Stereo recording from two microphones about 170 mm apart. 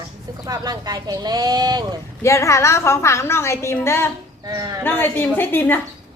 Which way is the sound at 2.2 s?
15° left (ahead or behind).